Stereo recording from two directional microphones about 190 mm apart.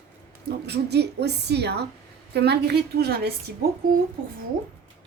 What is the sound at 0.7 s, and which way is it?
A woman's voice, 60° right (ahead or behind).